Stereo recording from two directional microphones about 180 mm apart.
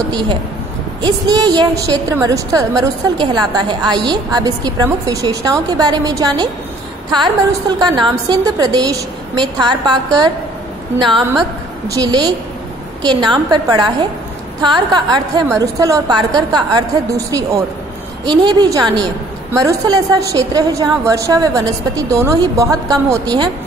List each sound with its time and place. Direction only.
0.1 s a woman's voice: 25° right (ahead or behind)
7.8 s a woman's voice: 25° right (ahead or behind)
11.9 s a woman's voice: 20° right (ahead or behind)